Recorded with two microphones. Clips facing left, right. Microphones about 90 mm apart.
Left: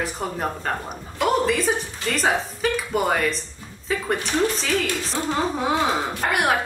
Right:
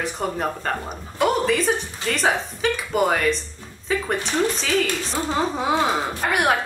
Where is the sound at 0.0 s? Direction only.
Centre (ahead or behind).